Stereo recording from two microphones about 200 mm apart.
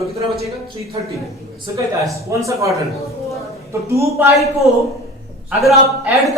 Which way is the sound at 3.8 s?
15° right (ahead or behind).